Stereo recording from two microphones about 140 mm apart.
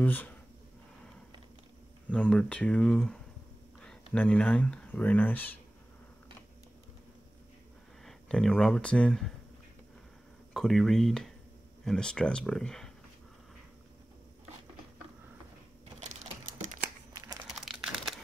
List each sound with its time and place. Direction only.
0.0 s speech: 10° left (ahead or behind)
2.0 s speech: 5° left (ahead or behind)
8.0 s speech: 5° left (ahead or behind)
10.5 s speech: centre (ahead or behind)
16.0 s typing: 55° right (ahead or behind)
17.4 s crumpling: 5° right (ahead or behind)